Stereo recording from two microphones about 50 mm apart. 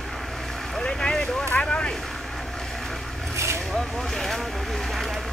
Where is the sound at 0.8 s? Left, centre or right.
Centre.